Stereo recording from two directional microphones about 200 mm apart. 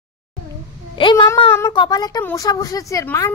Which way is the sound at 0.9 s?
25° left (ahead or behind).